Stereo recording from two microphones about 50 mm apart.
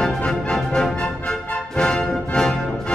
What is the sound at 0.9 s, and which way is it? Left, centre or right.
Music, left.